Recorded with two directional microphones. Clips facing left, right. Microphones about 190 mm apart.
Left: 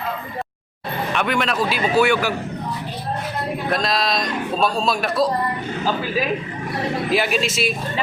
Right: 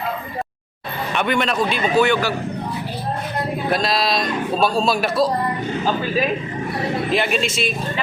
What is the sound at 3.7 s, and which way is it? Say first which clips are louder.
A woman's voice: right 1 dB; centre (ahead or behind).